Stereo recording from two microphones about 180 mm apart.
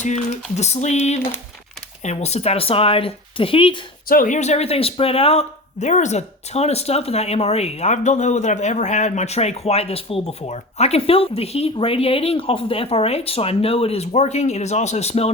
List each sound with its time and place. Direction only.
0.0 s speech: 40° left (ahead or behind)
4.1 s speech: 45° left (ahead or behind)